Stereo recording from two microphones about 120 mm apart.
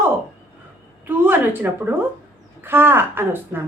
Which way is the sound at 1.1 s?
15° right (ahead or behind).